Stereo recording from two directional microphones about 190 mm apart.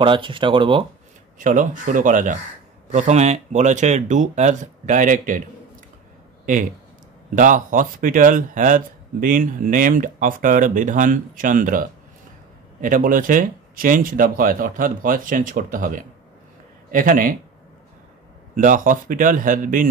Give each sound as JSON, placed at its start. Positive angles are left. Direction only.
{"t": 0.0, "sound": "speech", "side_deg": -25}
{"t": 1.4, "sound": "speech", "side_deg": -40}
{"t": 6.4, "sound": "speech", "side_deg": -45}
{"t": 18.6, "sound": "speech", "side_deg": -45}